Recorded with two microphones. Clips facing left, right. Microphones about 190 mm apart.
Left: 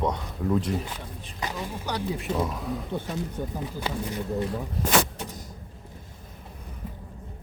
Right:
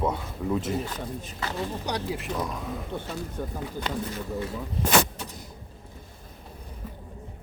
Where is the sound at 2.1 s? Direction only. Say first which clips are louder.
Left 3 dB; 5° left (ahead or behind).